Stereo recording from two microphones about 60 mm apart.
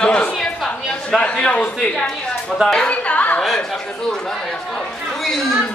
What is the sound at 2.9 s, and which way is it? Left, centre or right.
Chatter, left.